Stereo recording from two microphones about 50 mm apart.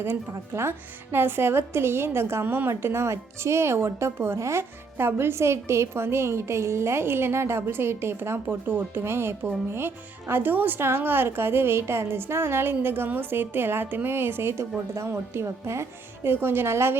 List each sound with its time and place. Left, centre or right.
0.0 s a woman's voice: right
4.9 s a woman's voice: right
15.0 s a woman's voice: right